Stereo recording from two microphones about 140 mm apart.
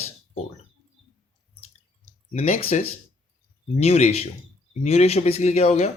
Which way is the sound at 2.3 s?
50° left (ahead or behind).